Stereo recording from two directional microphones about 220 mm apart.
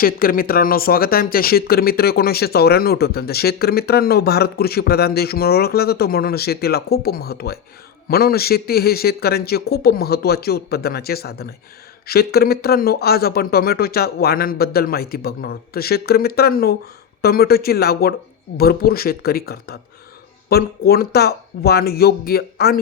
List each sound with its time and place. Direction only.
0.0 s speech: 40° left (ahead or behind)